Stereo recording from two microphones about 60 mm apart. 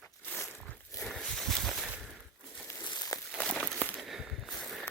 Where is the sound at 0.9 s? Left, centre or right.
Left.